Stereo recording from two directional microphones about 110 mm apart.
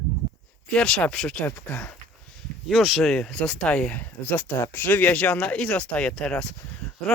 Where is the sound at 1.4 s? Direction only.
20° left (ahead or behind).